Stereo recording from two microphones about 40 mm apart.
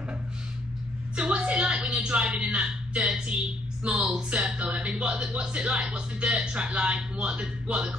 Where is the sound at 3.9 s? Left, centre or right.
Centre.